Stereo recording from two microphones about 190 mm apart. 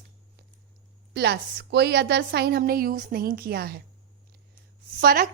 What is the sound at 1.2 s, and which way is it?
Speech, 60° right (ahead or behind).